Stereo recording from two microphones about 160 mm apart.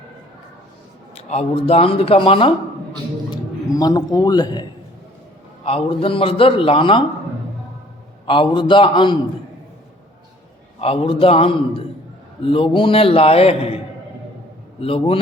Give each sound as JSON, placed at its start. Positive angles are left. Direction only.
{"t": 1.1, "sound": "a man's voice", "side_deg": 40}
{"t": 5.6, "sound": "a man's voice", "side_deg": 35}
{"t": 8.3, "sound": "a man's voice", "side_deg": 30}
{"t": 10.8, "sound": "a man's voice", "side_deg": 35}